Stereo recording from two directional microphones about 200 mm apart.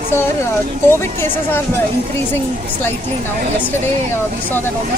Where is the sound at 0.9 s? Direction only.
10° left (ahead or behind).